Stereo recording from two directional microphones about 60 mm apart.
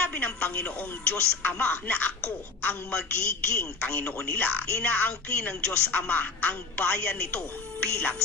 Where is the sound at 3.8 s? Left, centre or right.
Left.